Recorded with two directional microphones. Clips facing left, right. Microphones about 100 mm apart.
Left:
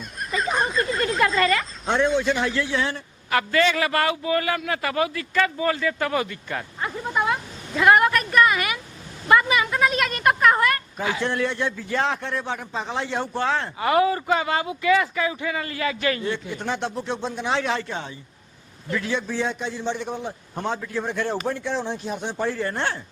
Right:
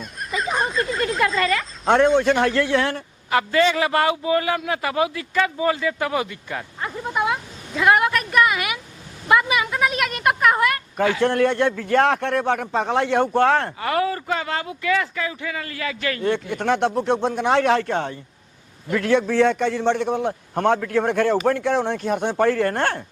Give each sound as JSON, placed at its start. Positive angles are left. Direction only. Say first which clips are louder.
{"t": 0.0, "sound": "a sound", "louder": "even", "side_deg": 0}
{"t": 1.8, "sound": "a man's voice", "louder": "right 7 dB", "side_deg": -55}
{"t": 3.2, "sound": "a man's voice", "louder": "right 2 dB", "side_deg": -20}
{"t": 6.7, "sound": "a sound", "louder": "even", "side_deg": 0}
{"t": 7.1, "sound": "a woman's voice", "louder": "right 1 dB", "side_deg": -10}
{"t": 11.2, "sound": "a man's voice", "louder": "right 6 dB", "side_deg": -55}
{"t": 13.7, "sound": "speech", "louder": "left 2 dB", "side_deg": 20}
{"t": 16.2, "sound": "a man's voice", "louder": "right 6 dB", "side_deg": -60}